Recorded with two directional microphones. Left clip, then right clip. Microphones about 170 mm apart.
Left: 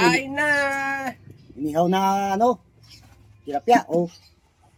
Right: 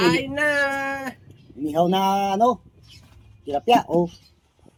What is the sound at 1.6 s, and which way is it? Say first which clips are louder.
Speech: even; centre (ahead or behind).